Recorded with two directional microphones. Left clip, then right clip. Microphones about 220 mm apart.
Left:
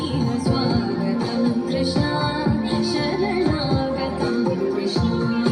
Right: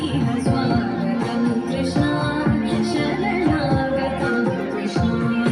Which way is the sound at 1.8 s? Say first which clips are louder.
Right 1 dB; 30° right (ahead or behind).